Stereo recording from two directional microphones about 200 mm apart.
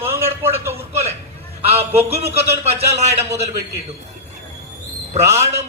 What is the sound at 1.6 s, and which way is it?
Speech, 30° right (ahead or behind).